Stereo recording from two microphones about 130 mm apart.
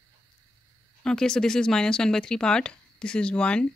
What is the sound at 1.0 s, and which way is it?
Speech, 5° left (ahead or behind).